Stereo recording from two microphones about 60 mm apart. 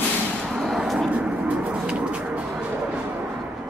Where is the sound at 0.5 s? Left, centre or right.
Centre.